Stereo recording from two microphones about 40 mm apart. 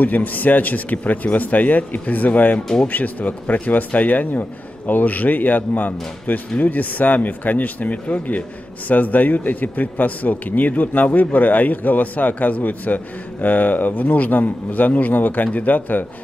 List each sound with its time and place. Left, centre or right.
0.0 s speech: left